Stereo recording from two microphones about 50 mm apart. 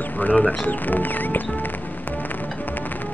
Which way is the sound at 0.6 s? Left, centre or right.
Left.